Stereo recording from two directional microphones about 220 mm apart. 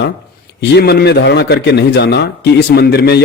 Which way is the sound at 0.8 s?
45° left (ahead or behind).